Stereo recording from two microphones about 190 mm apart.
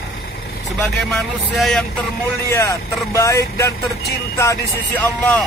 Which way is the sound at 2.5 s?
15° left (ahead or behind).